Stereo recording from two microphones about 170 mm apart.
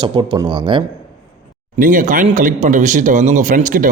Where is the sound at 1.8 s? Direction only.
50° right (ahead or behind).